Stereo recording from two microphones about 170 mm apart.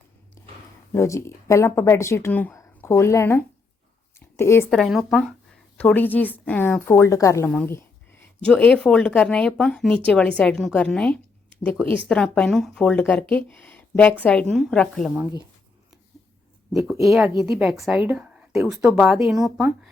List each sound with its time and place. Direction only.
0.4 s a sound: 15° left (ahead or behind)
0.9 s speech: 15° left (ahead or behind)
4.7 s speech: centre (ahead or behind)
5.7 s speech: 10° left (ahead or behind)
7.5 s a sound: 10° left (ahead or behind)
8.4 s speech: 5° left (ahead or behind)
17.2 s speech: 5° right (ahead or behind)